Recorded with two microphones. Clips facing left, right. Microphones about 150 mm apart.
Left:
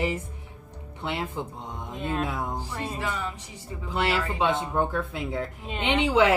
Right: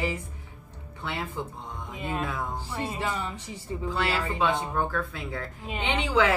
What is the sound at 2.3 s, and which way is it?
Speech, 20° left (ahead or behind).